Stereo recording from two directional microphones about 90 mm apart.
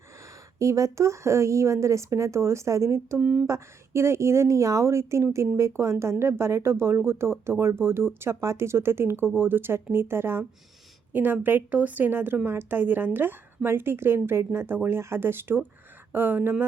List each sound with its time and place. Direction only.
0.6 s speech: 35° right (ahead or behind)
3.2 s speech: 15° right (ahead or behind)
3.4 s speech: 30° right (ahead or behind)